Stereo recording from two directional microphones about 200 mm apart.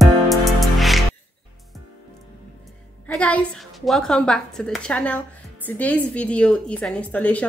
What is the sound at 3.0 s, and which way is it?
A woman's voice, 5° left (ahead or behind).